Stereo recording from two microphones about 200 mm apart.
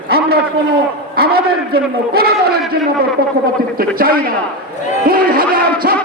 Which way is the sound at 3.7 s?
45° right (ahead or behind).